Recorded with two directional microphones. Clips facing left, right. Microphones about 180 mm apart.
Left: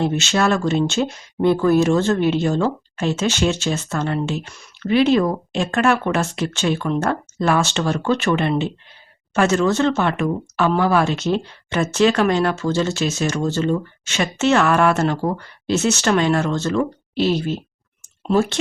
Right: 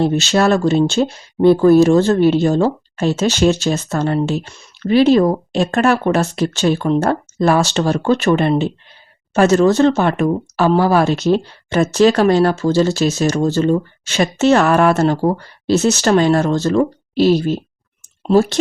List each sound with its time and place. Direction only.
0.0 s speech: 35° right (ahead or behind)